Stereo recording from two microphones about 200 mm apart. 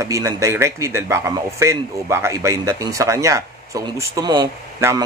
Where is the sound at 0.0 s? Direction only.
15° right (ahead or behind).